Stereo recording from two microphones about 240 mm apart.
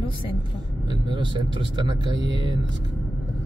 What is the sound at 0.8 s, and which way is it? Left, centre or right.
Speech, centre.